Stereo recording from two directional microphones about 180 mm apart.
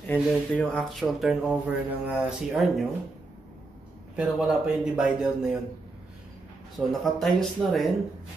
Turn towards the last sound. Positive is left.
turn(degrees=0)  # may be behind; listen again after turning